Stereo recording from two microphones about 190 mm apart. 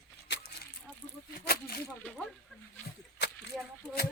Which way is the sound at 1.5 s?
50° left (ahead or behind).